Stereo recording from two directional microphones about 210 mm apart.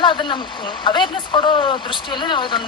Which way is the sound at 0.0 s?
20° left (ahead or behind).